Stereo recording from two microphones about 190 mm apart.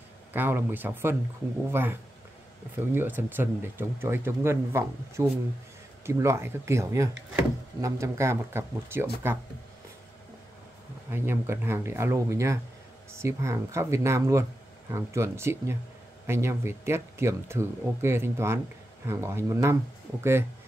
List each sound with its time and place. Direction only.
0.3 s speech: 10° right (ahead or behind)
11.1 s speech: 10° right (ahead or behind)